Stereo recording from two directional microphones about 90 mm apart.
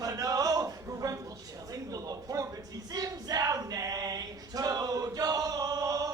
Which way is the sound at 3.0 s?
40° right (ahead or behind).